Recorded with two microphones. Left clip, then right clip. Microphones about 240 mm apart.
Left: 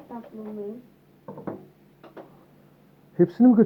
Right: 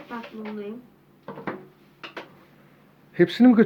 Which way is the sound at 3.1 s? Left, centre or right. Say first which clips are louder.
Right 1 dB; right.